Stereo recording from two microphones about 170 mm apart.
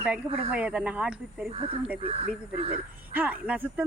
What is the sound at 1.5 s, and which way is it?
Speech, 35° right (ahead or behind).